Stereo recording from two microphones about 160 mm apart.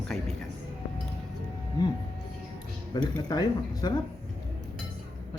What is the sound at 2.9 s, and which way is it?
Speech, 25° left (ahead or behind).